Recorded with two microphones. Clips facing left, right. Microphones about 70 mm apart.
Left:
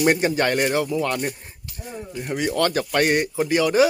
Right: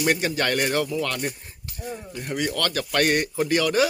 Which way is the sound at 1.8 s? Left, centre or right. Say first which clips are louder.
Left 1 dB; centre.